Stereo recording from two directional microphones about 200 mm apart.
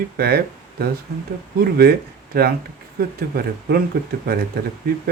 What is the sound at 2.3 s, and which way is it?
Speech, 50° right (ahead or behind).